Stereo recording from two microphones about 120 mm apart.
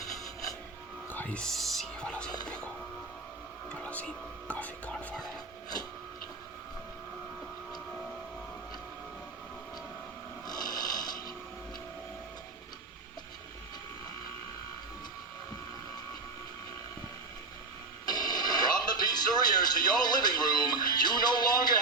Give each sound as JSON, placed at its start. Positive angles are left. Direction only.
{"t": 1.1, "sound": "music", "side_deg": 10}
{"t": 3.7, "sound": "whispering", "side_deg": 10}
{"t": 10.4, "sound": "snoring", "side_deg": 35}
{"t": 18.0, "sound": "music", "side_deg": 35}